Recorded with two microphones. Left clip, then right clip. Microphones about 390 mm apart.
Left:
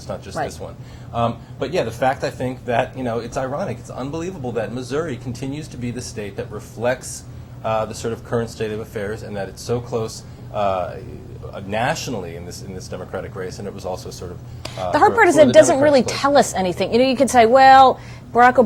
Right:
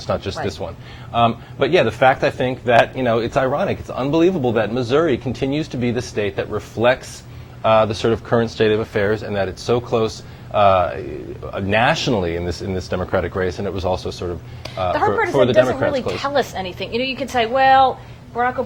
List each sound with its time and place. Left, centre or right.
0.1 s speech: right
1.1 s speech: right
14.6 s speech: left
18.3 s speech: left